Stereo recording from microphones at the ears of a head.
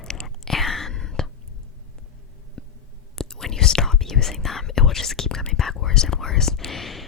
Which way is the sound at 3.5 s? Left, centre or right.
Left.